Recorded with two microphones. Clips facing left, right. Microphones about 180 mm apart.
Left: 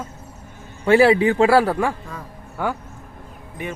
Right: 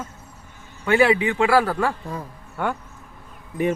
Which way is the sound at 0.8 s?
30° left (ahead or behind).